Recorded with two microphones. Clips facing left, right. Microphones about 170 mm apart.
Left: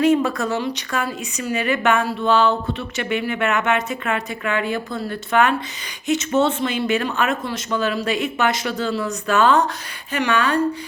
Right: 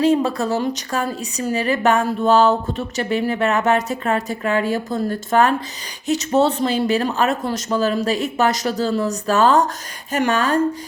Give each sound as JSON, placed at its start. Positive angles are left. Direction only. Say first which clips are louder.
{"t": 0.0, "sound": "a woman's voice", "louder": "even", "side_deg": -30}